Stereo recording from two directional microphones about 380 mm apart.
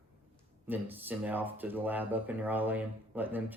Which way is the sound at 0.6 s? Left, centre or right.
Centre.